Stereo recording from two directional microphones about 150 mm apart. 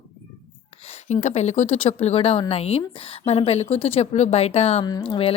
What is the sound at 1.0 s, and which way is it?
A woman's voice, 50° left (ahead or behind).